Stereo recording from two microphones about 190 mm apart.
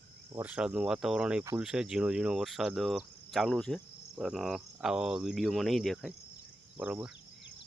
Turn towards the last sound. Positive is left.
turn(degrees=-5)  # may be behind; listen again after turning